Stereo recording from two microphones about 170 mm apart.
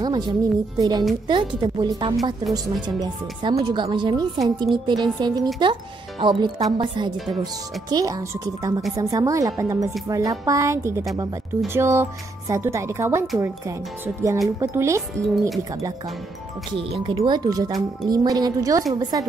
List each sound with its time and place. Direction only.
0.0 s speech: 25° right (ahead or behind)
16.7 s speech: 30° right (ahead or behind)